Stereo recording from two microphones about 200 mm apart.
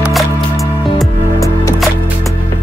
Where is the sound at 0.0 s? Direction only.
Centre (ahead or behind).